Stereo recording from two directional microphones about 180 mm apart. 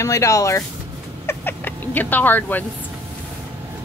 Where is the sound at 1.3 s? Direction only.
10° left (ahead or behind).